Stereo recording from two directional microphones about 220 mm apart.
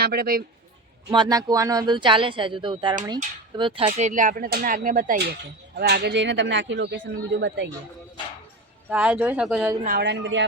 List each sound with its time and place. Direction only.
0.0 s speech: 45° right (ahead or behind)
1.1 s speech: 20° right (ahead or behind); by 7.7 s 55° right (ahead or behind)
8.9 s speech: 5° right (ahead or behind)
9.8 s speech: 45° right (ahead or behind)